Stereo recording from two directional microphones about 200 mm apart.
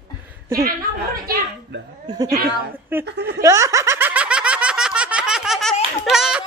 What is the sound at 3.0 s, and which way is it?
Speech, 55° right (ahead or behind).